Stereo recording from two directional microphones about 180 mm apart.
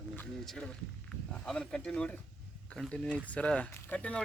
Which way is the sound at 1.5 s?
5° left (ahead or behind).